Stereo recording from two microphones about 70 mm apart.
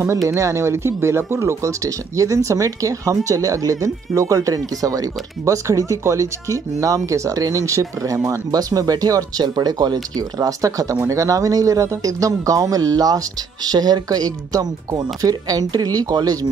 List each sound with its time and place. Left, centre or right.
0.3 s speech: right
10.1 s speech: right